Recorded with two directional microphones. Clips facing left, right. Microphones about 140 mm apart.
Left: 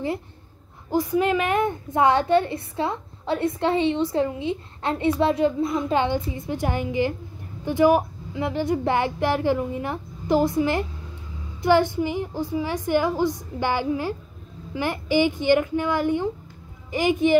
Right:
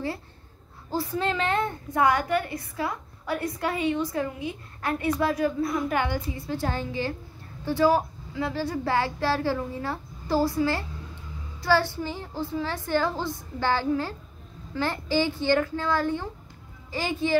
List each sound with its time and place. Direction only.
0.8 s a child's voice: 15° left (ahead or behind)